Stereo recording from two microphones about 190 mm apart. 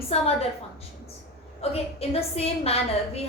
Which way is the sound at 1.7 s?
30° left (ahead or behind).